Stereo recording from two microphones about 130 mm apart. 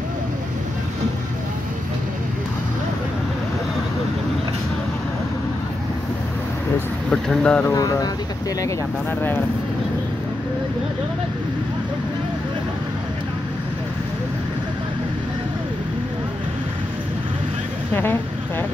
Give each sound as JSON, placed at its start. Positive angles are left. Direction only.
{"t": 7.1, "sound": "speech", "side_deg": 5}
{"t": 7.7, "sound": "speech", "side_deg": 30}